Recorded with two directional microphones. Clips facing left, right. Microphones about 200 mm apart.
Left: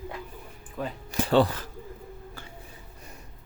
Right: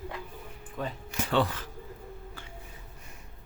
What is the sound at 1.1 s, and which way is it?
Speech, 35° left (ahead or behind).